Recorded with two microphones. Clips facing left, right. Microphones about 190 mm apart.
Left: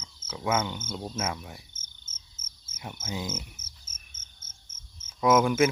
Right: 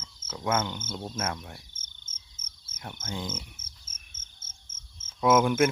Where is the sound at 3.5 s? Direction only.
55° right (ahead or behind).